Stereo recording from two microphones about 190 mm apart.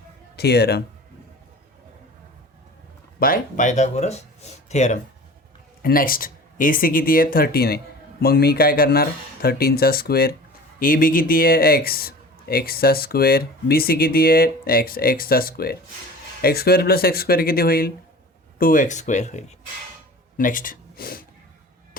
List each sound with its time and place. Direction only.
0.3 s speech: 60° left (ahead or behind)
3.2 s speech: 45° left (ahead or behind)
5.8 s speech: 50° left (ahead or behind)